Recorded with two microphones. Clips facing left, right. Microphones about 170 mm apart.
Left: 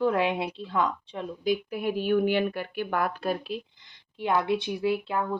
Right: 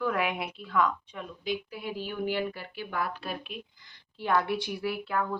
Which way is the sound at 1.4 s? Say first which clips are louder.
Left 7 dB; 50° left (ahead or behind).